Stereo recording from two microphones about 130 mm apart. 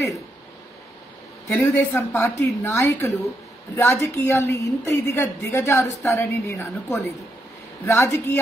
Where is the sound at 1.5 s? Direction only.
20° left (ahead or behind).